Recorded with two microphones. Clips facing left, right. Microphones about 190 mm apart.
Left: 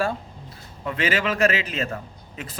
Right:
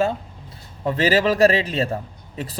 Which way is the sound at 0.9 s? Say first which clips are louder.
Right 6 dB; 35° right (ahead or behind).